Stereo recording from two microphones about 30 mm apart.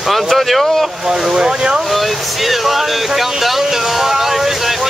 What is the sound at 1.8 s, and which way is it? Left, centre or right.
Speech, centre.